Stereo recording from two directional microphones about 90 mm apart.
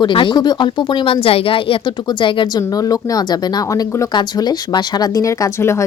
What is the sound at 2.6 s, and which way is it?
Speech, 45° left (ahead or behind).